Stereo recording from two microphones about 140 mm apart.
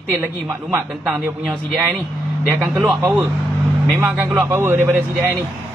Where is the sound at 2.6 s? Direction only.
10° right (ahead or behind).